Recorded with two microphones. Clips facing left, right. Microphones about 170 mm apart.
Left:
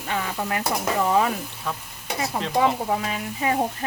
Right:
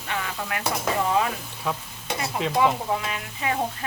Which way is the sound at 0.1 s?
35° left (ahead or behind).